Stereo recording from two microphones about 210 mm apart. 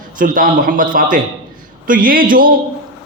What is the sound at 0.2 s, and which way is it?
A man's voice, 40° right (ahead or behind).